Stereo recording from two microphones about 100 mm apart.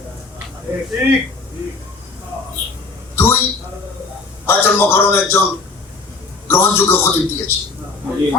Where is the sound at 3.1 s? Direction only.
25° left (ahead or behind).